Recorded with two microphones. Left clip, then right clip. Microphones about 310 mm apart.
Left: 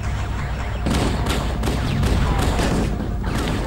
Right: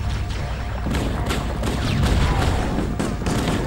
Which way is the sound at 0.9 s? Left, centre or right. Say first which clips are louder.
Left 2 dB; centre.